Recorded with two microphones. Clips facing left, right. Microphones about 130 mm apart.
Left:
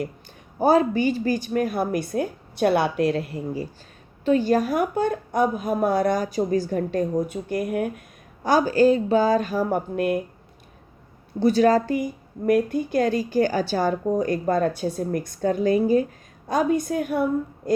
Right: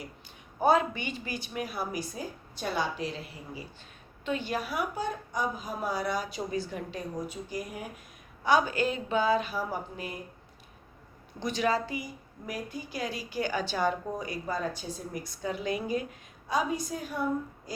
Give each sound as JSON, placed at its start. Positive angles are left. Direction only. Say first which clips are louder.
{"t": 0.6, "sound": "a woman's voice", "louder": "left 7 dB", "side_deg": 35}
{"t": 4.3, "sound": "a woman's voice", "louder": "left 12 dB", "side_deg": 40}
{"t": 8.4, "sound": "speech", "louder": "left 8 dB", "side_deg": 40}
{"t": 11.4, "sound": "a woman's voice", "louder": "left 11 dB", "side_deg": 40}
{"t": 16.5, "sound": "a woman's voice", "louder": "left 8 dB", "side_deg": 55}